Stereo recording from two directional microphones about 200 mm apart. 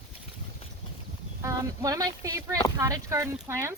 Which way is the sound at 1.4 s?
15° right (ahead or behind).